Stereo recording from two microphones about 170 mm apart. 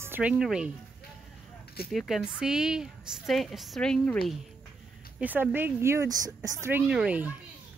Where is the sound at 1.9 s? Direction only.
Centre (ahead or behind).